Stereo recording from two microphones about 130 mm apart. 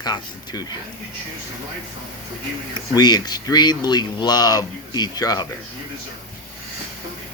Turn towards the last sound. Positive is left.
turn(degrees=30)  # may be behind; listen again after turning